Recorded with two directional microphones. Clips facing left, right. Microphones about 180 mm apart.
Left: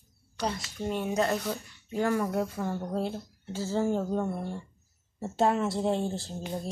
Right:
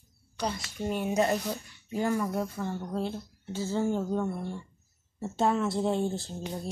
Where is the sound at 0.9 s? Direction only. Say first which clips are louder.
Right 1 dB; 10° right (ahead or behind); by 3.8 s 10° left (ahead or behind).